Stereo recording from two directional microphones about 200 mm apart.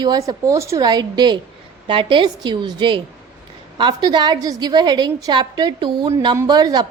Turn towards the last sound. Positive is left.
turn(degrees=-20)  # may be behind; listen again after turning